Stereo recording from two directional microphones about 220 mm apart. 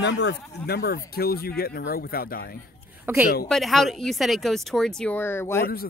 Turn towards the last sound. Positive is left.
turn(degrees=10)  # may be behind; listen again after turning